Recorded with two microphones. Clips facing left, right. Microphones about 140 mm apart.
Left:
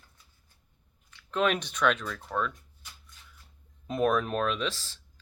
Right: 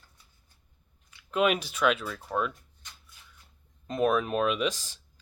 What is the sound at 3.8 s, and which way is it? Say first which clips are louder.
Speech: right 1 dB; centre (ahead or behind).